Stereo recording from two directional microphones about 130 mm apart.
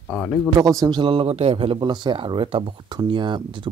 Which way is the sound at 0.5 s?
25° right (ahead or behind).